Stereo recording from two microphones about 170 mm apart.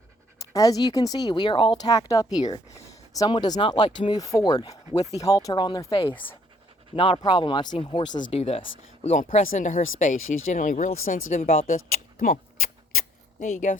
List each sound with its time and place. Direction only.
0.5 s speech: 20° left (ahead or behind)
8.3 s speech: 35° left (ahead or behind)
12.2 s a sound: 55° left (ahead or behind)